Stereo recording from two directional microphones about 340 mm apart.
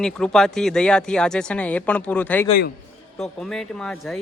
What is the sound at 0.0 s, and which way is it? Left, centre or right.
Speech, centre.